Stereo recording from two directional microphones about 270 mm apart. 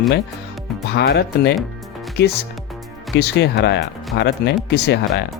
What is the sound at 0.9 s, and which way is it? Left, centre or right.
Speech, left.